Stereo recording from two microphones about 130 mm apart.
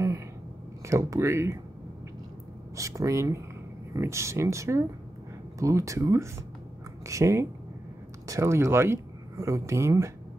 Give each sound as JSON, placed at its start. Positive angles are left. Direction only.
{"t": 0.8, "sound": "speech", "side_deg": -25}
{"t": 2.7, "sound": "speech", "side_deg": -25}